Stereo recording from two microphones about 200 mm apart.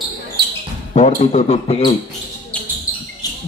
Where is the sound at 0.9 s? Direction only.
35° left (ahead or behind).